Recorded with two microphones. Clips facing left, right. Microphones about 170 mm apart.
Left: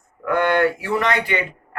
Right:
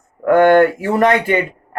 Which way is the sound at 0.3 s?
50° right (ahead or behind).